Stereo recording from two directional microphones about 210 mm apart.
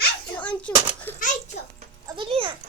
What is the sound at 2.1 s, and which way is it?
Music, 25° right (ahead or behind).